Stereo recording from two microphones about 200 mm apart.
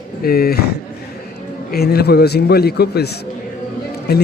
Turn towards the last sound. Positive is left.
turn(degrees=55)  # may be behind; listen again after turning